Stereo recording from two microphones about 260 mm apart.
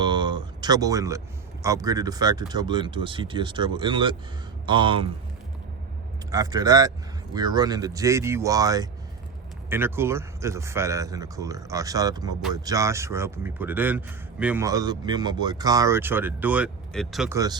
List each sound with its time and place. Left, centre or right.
0.0 s a sound: centre
1.6 s a man's voice: centre
6.3 s a man's voice: centre
17.3 s a man's voice: centre